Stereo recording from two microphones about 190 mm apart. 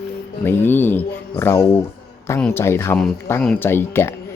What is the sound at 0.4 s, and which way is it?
Speech, 10° left (ahead or behind).